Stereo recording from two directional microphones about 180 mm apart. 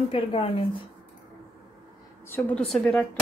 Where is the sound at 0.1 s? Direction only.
30° left (ahead or behind).